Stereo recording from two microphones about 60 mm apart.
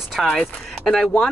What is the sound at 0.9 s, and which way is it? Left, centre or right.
Speech, centre.